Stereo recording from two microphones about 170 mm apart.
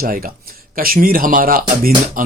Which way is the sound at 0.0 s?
60° right (ahead or behind).